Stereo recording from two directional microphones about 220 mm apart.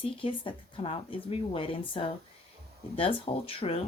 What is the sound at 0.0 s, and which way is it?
Speech, 25° left (ahead or behind).